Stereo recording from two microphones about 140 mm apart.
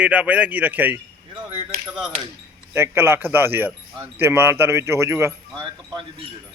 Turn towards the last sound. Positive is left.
turn(degrees=-35)  # may be behind; listen again after turning